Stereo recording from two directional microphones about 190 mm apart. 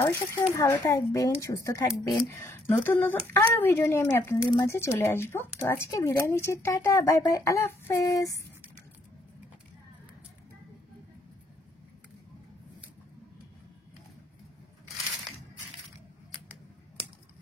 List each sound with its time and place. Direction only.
0.0 s speech: 15° left (ahead or behind)
1.9 s speech: centre (ahead or behind)
2.2 s speech: 15° left (ahead or behind)